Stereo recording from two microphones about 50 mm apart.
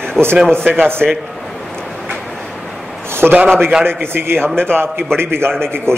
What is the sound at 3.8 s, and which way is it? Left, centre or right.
A man's voice, right.